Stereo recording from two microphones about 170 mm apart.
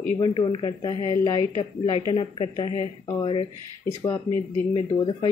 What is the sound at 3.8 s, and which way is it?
Speech, 15° left (ahead or behind).